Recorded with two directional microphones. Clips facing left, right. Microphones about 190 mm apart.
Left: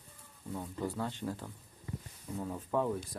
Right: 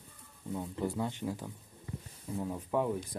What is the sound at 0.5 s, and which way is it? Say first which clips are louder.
Speech: right 3 dB; 10° right (ahead or behind).